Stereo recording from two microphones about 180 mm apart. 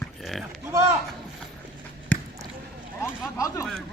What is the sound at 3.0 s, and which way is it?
Speech, 20° left (ahead or behind).